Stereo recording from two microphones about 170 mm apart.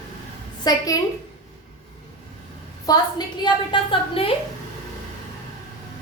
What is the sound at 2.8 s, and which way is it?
A woman's voice, 25° left (ahead or behind).